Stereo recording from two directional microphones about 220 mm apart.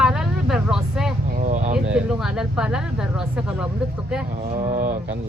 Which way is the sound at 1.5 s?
35° right (ahead or behind).